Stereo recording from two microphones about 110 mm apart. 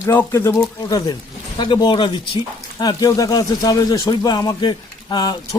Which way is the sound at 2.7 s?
35° left (ahead or behind).